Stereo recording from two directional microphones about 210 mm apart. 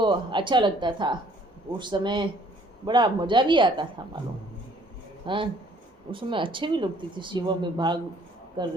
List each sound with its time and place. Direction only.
0.0 s speech: 20° right (ahead or behind)
5.2 s speech: 25° right (ahead or behind)